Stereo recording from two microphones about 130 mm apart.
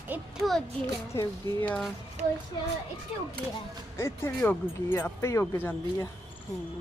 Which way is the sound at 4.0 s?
15° left (ahead or behind).